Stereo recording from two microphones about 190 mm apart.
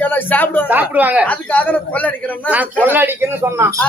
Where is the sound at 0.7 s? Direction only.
10° right (ahead or behind).